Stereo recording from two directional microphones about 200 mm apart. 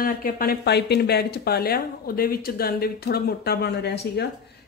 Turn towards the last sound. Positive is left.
turn(degrees=55)  # may be behind; listen again after turning